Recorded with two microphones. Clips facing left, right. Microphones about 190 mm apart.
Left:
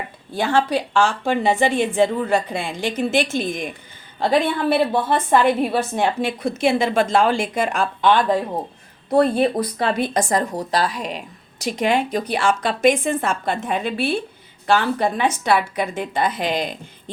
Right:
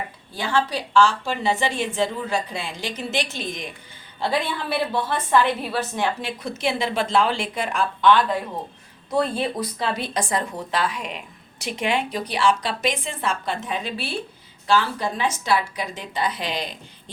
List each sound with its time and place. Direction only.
0.3 s a woman's voice: 50° left (ahead or behind)